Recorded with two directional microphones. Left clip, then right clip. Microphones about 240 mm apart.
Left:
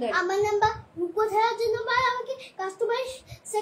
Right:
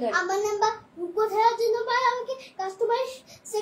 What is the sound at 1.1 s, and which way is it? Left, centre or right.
Child singing, centre.